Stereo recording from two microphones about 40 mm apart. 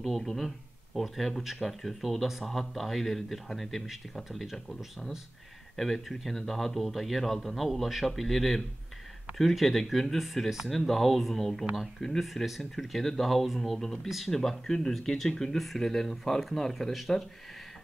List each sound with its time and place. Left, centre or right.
0.0 s speech: centre
3.8 s speech: centre
14.3 s speech: centre